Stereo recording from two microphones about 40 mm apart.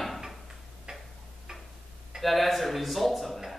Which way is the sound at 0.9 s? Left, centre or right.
Centre.